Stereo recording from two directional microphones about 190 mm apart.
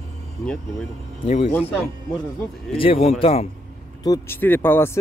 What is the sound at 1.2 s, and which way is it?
Speech, 35° left (ahead or behind).